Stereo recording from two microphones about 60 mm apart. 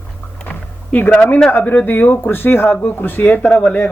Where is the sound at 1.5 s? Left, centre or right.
Left.